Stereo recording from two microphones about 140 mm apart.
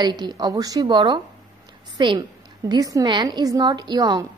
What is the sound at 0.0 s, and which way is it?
A woman's voice, 30° right (ahead or behind).